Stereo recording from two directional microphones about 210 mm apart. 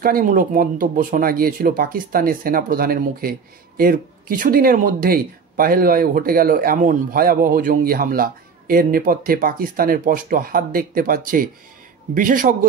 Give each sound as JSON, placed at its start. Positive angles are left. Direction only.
{"t": 0.0, "sound": "a man's voice", "side_deg": -40}